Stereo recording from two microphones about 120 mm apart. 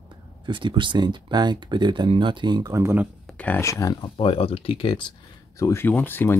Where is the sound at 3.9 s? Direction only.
45° left (ahead or behind).